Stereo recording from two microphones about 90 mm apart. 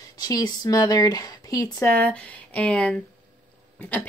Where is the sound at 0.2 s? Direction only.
45° left (ahead or behind).